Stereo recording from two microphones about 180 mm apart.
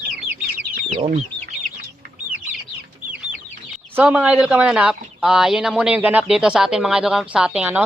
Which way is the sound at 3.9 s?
5° right (ahead or behind).